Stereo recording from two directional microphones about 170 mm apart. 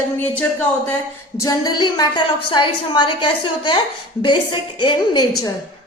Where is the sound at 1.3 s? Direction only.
20° left (ahead or behind).